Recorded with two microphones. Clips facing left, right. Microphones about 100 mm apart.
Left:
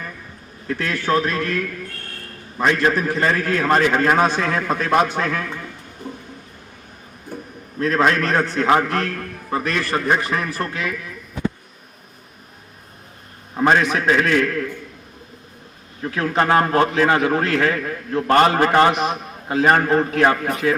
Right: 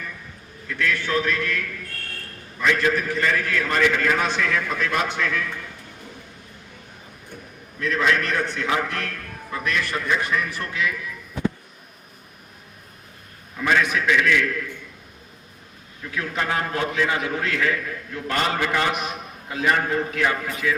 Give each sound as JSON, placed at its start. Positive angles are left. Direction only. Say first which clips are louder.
{"t": 0.7, "sound": "a man's voice", "louder": "left 4 dB", "side_deg": 40}
{"t": 7.8, "sound": "a man's voice", "louder": "left 4 dB", "side_deg": 45}
{"t": 13.5, "sound": "a man's voice", "louder": "left 5 dB", "side_deg": 45}
{"t": 16.0, "sound": "a man's voice", "louder": "left 8 dB", "side_deg": 45}